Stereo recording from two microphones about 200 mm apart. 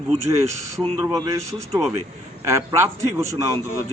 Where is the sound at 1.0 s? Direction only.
20° right (ahead or behind).